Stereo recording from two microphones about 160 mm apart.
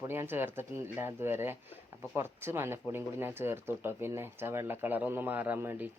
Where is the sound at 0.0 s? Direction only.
15° right (ahead or behind).